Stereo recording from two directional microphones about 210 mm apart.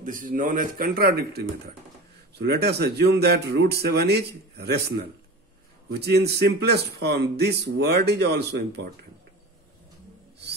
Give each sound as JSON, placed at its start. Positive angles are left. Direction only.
{"t": 0.0, "sound": "speech", "side_deg": -40}